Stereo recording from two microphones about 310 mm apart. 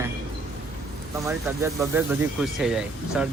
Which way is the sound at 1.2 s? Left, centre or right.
Centre.